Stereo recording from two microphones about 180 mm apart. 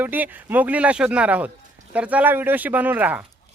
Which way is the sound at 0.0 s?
10° right (ahead or behind).